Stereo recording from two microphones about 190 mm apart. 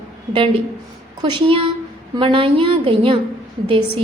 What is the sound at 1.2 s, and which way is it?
A woman's voice, 25° right (ahead or behind).